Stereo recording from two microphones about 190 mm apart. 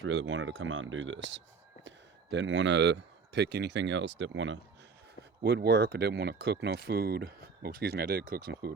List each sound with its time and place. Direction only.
0.0 s speech: 75° right (ahead or behind)
5.4 s speech: 60° right (ahead or behind)